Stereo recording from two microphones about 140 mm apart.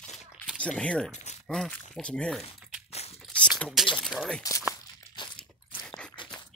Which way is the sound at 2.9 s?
45° left (ahead or behind).